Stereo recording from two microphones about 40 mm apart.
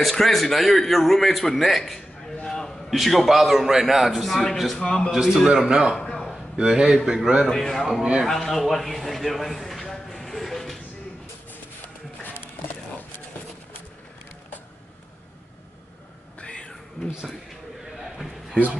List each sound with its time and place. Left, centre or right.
0.1 s a man's voice: centre
2.4 s a sound: centre
3.0 s a man's voice: centre
4.1 s a man's voice: centre
4.7 s a man's voice: centre
5.1 s a man's voice: centre
7.4 s a man's voice: centre
8.3 s a sound: centre
16.3 s cat: left
17.9 s a sound: centre